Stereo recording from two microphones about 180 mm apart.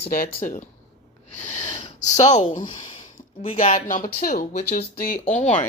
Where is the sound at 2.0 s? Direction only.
40° left (ahead or behind).